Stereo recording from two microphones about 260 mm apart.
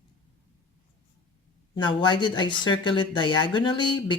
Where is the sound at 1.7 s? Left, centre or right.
Centre.